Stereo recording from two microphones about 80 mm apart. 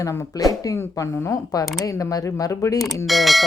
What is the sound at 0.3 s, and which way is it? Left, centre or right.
Speech, left.